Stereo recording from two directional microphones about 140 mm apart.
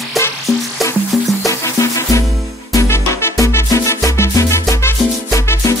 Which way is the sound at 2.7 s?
20° left (ahead or behind).